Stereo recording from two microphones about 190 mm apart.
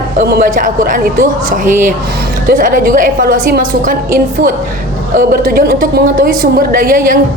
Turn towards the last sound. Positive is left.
turn(degrees=-50)  # may be behind; listen again after turning